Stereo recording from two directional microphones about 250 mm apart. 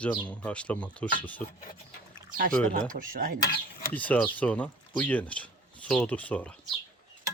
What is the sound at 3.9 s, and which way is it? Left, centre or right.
Speech, centre.